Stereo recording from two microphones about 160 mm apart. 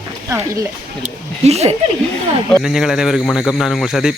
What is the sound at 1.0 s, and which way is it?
Speech, 40° right (ahead or behind).